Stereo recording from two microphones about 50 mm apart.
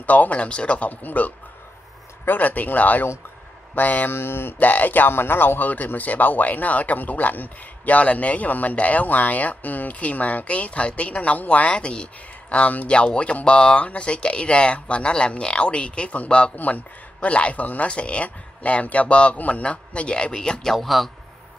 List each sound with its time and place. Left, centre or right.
0.0 s speech: left
4.1 s speech: left
4.6 s speech: left
16.5 s speech: left; by 20.7 s centre
20.7 s a man's voice: centre